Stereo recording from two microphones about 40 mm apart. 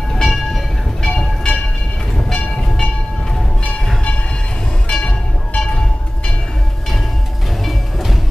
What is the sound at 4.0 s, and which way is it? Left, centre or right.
Train, left.